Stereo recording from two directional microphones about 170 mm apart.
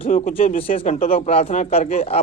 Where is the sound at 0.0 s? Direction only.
40° left (ahead or behind).